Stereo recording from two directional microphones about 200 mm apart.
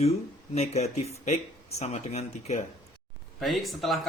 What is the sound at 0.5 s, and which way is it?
Speech, 35° left (ahead or behind).